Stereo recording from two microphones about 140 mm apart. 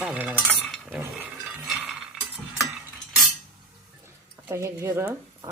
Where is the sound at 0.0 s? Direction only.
10° right (ahead or behind).